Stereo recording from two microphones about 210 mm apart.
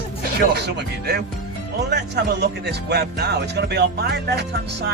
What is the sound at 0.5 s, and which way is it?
Speech, 50° right (ahead or behind).